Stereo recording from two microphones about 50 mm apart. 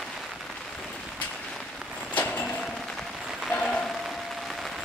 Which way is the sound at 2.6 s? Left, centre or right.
Centre.